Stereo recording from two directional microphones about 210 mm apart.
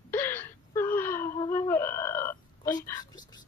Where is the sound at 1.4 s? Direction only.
15° left (ahead or behind).